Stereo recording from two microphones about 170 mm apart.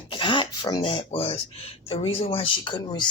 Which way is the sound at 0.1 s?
30° left (ahead or behind).